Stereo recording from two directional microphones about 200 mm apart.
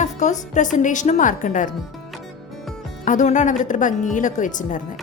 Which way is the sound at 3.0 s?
40° left (ahead or behind).